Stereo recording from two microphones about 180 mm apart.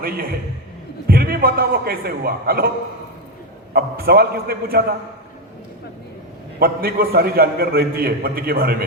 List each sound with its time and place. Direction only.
0.0 s a man's voice: 55° right (ahead or behind)
3.7 s a man's voice: 60° right (ahead or behind)
6.6 s a man's voice: 55° right (ahead or behind)